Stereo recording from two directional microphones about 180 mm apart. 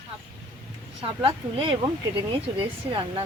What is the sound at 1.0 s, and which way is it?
Speech, 30° right (ahead or behind).